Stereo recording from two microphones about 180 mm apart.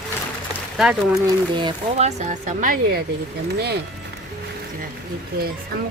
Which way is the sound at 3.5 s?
65° right (ahead or behind).